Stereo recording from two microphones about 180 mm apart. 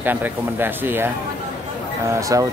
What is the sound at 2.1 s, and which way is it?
Speech, 20° right (ahead or behind).